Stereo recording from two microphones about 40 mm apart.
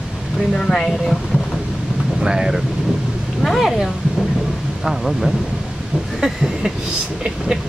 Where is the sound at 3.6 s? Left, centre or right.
Centre.